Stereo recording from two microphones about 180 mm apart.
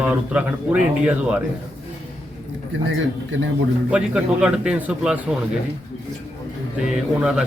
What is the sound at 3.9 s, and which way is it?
A man's voice, 5° right (ahead or behind).